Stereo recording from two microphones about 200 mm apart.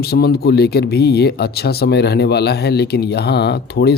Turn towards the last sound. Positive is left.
turn(degrees=55)  # may be behind; listen again after turning